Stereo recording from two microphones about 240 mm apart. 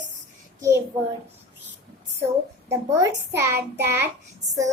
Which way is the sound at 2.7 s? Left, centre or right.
Centre.